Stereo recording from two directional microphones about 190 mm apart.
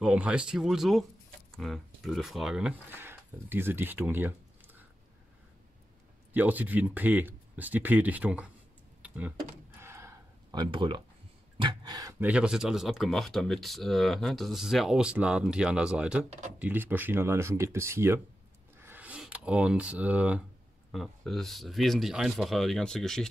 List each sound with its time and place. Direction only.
0.0 s speech: 5° right (ahead or behind)
6.3 s speech: 10° right (ahead or behind)
9.0 s computer keyboard: 10° right (ahead or behind)
9.8 s a sound: 15° right (ahead or behind)
11.5 s speech: 25° right (ahead or behind); by 23.2 s centre (ahead or behind)